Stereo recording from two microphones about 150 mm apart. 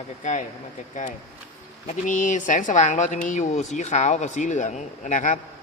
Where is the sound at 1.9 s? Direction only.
60° left (ahead or behind).